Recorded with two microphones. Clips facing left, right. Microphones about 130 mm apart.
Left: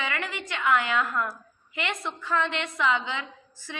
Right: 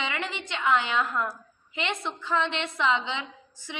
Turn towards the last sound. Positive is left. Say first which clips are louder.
# even
turn(degrees=-20)  # may be behind; listen again after turning